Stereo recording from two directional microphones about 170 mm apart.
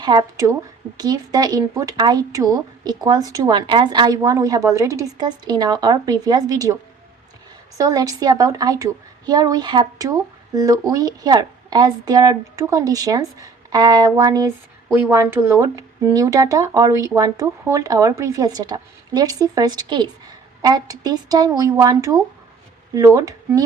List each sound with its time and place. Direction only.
0.0 s speech: 25° right (ahead or behind)
7.8 s speech: 20° right (ahead or behind)